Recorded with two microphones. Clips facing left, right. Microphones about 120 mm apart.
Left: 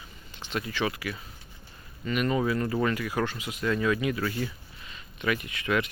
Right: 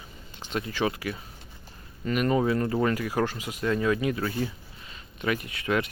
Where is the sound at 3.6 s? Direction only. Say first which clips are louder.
Right 1 dB; 30° right (ahead or behind).